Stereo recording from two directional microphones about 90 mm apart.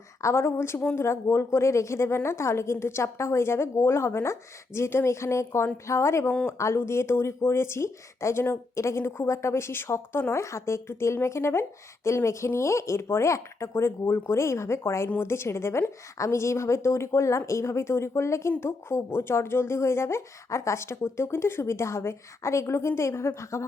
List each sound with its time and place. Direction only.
0.2 s speech: 30° left (ahead or behind)